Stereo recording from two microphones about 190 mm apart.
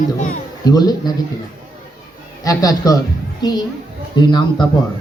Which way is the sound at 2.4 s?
20° left (ahead or behind).